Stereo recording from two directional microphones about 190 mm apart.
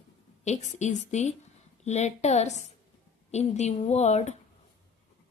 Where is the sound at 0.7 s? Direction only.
40° left (ahead or behind).